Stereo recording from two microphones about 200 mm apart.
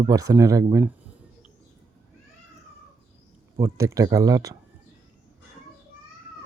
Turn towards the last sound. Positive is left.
turn(degrees=-15)  # may be behind; listen again after turning